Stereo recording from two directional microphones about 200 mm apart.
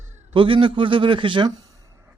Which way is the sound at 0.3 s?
25° right (ahead or behind).